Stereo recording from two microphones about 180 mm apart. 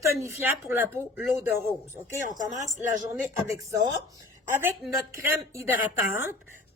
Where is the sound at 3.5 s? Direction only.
20° right (ahead or behind).